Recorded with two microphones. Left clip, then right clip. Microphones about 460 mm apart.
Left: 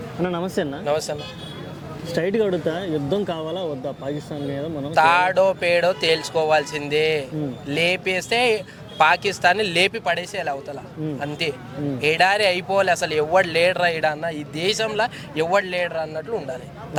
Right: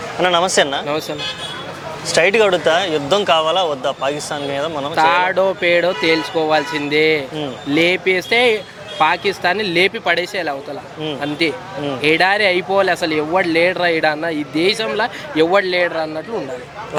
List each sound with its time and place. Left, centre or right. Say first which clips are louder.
0.2 s speech: right 11 dB; centre
0.4 s speech: right 10 dB; right
0.9 s speech: right 1 dB; left
2.0 s speech: right 9 dB; right
3.3 s speech: right 12 dB; centre
4.9 s speech: right 2 dB; left